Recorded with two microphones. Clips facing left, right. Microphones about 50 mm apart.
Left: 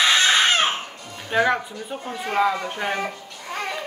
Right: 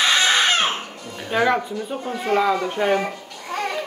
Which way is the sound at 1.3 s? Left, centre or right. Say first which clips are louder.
Right 1 dB; centre.